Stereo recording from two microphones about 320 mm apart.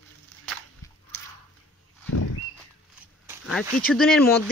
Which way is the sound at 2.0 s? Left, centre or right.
Left.